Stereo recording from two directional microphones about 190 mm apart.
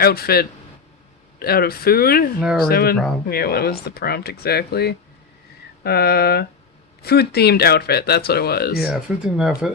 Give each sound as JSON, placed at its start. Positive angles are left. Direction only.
{"t": 0.0, "sound": "speech", "side_deg": 55}
{"t": 8.9, "sound": "speech", "side_deg": -5}